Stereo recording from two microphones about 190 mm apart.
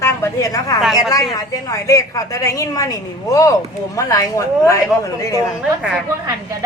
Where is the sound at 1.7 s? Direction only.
15° left (ahead or behind).